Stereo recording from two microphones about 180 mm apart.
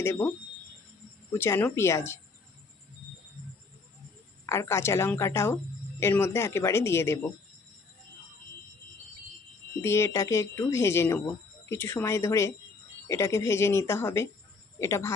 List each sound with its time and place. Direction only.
0.0 s speech: 15° left (ahead or behind)
4.4 s speech: 15° left (ahead or behind)
9.8 s speech: 15° left (ahead or behind)